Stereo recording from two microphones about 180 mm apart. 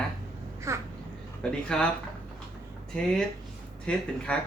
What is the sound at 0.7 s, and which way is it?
Babbling, 15° right (ahead or behind).